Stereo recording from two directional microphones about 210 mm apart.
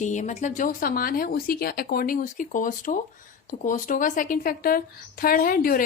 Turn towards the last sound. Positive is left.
turn(degrees=45)  # may be behind; listen again after turning